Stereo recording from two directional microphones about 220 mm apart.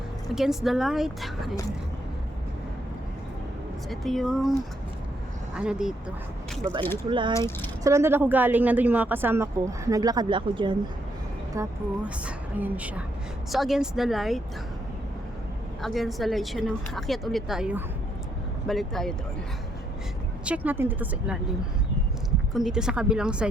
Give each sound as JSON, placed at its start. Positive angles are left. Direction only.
{"t": 0.3, "sound": "speech", "side_deg": 0}
{"t": 3.8, "sound": "speech", "side_deg": 0}
{"t": 5.5, "sound": "speech", "side_deg": -5}
{"t": 7.1, "sound": "speech", "side_deg": -20}
{"t": 7.3, "sound": "speech", "side_deg": 10}
{"t": 7.9, "sound": "speech", "side_deg": -10}
{"t": 11.5, "sound": "speech", "side_deg": -10}
{"t": 15.8, "sound": "speech", "side_deg": 0}
{"t": 20.7, "sound": "speech", "side_deg": -10}
{"t": 22.5, "sound": "speech", "side_deg": 0}